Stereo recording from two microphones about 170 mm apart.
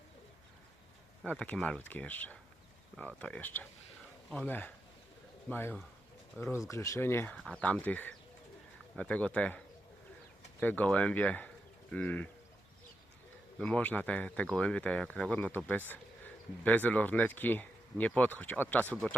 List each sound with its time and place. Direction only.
1.2 s speech: 5° left (ahead or behind)
13.6 s speech: 5° left (ahead or behind)